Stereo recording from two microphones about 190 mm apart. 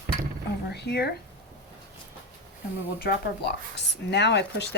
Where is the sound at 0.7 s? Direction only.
60° left (ahead or behind).